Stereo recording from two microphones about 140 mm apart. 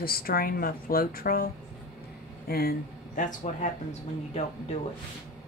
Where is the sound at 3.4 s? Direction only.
55° left (ahead or behind).